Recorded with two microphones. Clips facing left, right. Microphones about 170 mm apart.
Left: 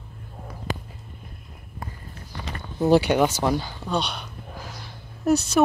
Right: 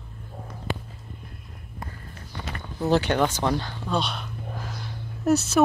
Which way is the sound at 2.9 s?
10° left (ahead or behind).